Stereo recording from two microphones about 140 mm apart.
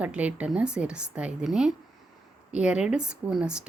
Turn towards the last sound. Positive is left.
turn(degrees=-5)  # may be behind; listen again after turning